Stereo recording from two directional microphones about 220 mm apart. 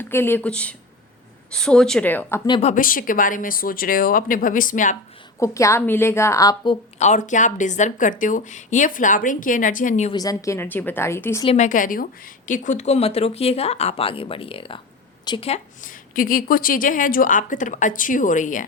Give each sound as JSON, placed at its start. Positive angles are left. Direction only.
{"t": 0.0, "sound": "a woman's voice", "side_deg": 10}
{"t": 2.5, "sound": "a woman's voice", "side_deg": 30}
{"t": 5.4, "sound": "a woman's voice", "side_deg": 15}
{"t": 7.0, "sound": "a woman's voice", "side_deg": 35}
{"t": 10.1, "sound": "a woman's voice", "side_deg": 15}
{"t": 11.4, "sound": "a woman's voice", "side_deg": 35}